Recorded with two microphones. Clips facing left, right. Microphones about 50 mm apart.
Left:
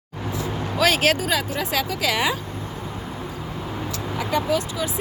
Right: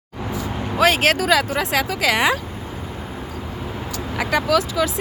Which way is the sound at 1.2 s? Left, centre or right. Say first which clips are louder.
Right 6 dB; right.